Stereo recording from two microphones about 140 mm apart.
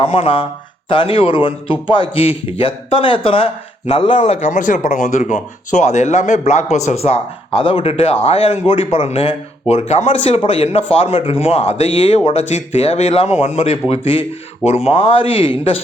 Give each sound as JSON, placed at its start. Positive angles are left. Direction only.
{"t": 0.0, "sound": "a man's voice", "side_deg": 40}
{"t": 4.2, "sound": "speech", "side_deg": 55}